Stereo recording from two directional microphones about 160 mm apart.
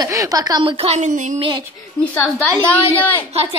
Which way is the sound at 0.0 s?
20° right (ahead or behind).